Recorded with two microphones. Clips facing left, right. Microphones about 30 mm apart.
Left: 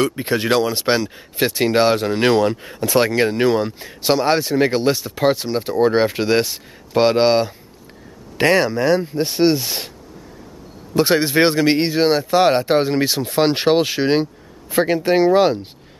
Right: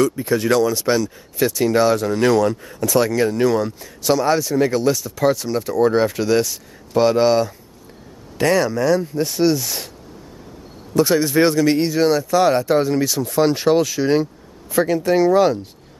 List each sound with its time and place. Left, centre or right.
0.0 s speech: left
11.0 s speech: left